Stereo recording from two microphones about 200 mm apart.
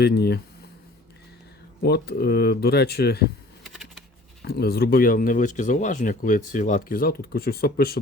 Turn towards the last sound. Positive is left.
turn(degrees=50)  # may be behind; listen again after turning